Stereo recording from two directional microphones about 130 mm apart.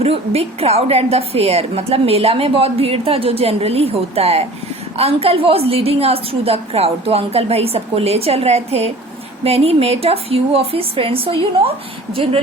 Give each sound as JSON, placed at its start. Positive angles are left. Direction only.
{"t": 0.0, "sound": "a woman's voice", "side_deg": -50}